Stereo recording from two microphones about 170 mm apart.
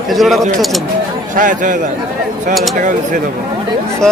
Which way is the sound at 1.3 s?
50° right (ahead or behind).